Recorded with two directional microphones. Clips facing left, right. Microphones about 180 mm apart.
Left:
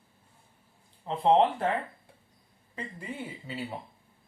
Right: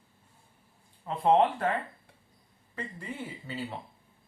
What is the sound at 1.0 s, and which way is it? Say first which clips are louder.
Speech: left 1 dB; 25° left (ahead or behind).